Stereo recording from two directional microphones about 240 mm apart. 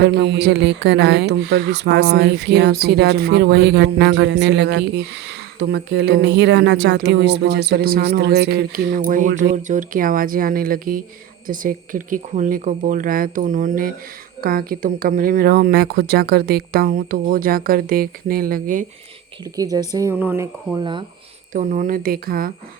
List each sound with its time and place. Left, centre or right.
0.0 s speech: right
19.5 s speech: centre
21.5 s speech: right